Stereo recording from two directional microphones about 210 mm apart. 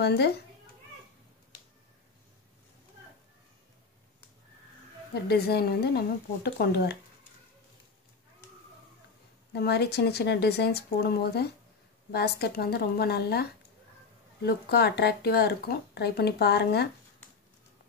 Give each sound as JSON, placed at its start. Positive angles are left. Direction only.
{"t": 0.0, "sound": "speech", "side_deg": 50}
{"t": 5.1, "sound": "speech", "side_deg": 50}
{"t": 9.5, "sound": "speech", "side_deg": 50}